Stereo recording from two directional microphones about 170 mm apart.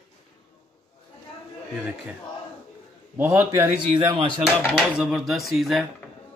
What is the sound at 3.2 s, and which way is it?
Speech, 15° right (ahead or behind).